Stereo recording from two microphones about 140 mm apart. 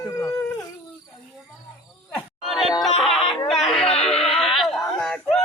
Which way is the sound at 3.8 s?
45° left (ahead or behind).